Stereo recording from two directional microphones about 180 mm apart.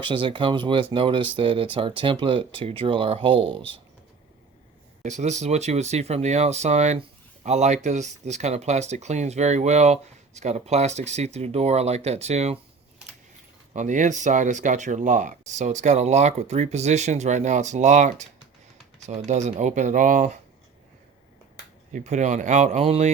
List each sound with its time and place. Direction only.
0.0 s speech: 30° right (ahead or behind)
5.0 s speech: 40° right (ahead or behind)
13.7 s speech: 45° right (ahead or behind)
21.9 s speech: 40° right (ahead or behind)